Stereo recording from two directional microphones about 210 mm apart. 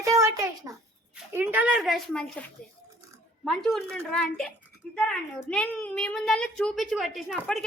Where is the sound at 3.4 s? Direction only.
Centre (ahead or behind).